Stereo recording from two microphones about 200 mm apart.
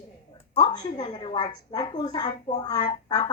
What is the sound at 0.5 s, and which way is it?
A woman's voice, 25° left (ahead or behind).